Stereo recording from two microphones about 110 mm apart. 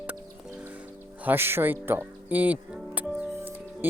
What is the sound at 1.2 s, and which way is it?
Music, 20° right (ahead or behind).